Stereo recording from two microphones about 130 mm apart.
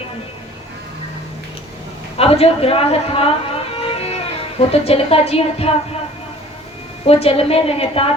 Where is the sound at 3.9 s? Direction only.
50° left (ahead or behind).